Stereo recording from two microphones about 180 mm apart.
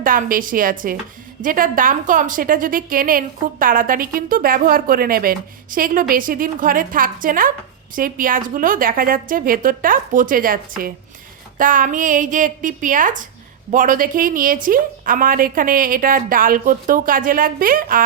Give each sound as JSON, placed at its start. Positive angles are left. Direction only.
{"t": 0.0, "sound": "a woman's voice", "side_deg": -50}